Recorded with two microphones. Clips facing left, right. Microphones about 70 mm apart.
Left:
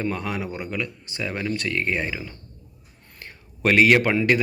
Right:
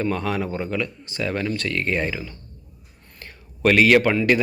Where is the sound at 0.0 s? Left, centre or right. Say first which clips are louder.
Right 3 dB; centre.